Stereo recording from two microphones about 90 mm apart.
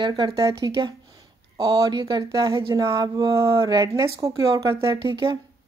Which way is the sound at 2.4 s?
35° right (ahead or behind).